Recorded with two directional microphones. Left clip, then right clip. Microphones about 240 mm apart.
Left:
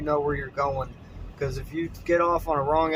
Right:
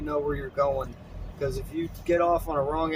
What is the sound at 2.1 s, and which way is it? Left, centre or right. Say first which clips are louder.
Speech: left 1 dB; centre.